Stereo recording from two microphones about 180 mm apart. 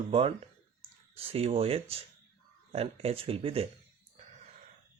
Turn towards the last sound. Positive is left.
turn(degrees=-30)  # may be behind; listen again after turning